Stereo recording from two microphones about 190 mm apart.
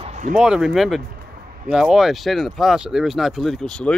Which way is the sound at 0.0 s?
35° right (ahead or behind).